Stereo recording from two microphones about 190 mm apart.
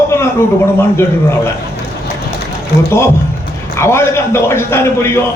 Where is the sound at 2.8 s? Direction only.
15° left (ahead or behind).